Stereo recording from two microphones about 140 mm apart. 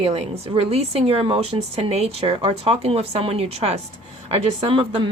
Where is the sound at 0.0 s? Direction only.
45° right (ahead or behind).